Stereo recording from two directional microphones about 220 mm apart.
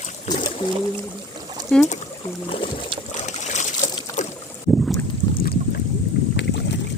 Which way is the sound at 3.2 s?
30° left (ahead or behind).